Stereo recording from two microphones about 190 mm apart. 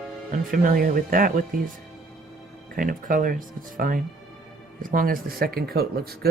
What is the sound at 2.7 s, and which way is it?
Speech, 45° right (ahead or behind).